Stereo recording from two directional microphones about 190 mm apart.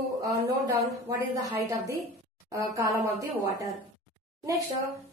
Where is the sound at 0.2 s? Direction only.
15° right (ahead or behind).